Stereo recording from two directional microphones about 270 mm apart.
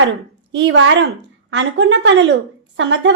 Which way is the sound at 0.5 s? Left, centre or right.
Right.